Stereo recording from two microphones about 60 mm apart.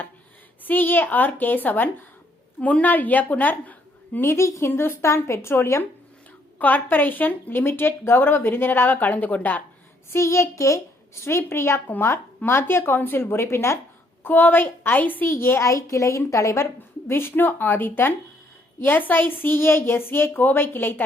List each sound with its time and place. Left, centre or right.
0.6 s a woman's voice: left
4.2 s a woman's voice: left
6.6 s speech: left
10.1 s a woman's voice: left
14.3 s speech: left
15.3 s a child's voice: left
17.1 s speech: left